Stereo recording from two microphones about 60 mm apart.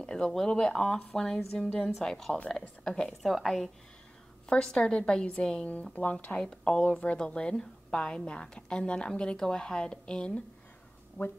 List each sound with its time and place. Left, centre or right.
0.0 s a woman's voice: centre
4.5 s a woman's voice: centre
6.0 s speech: left
6.4 s a woman's voice: centre
11.2 s speech: left